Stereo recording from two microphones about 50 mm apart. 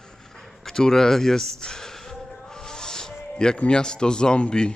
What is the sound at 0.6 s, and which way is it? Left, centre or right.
Speech, centre.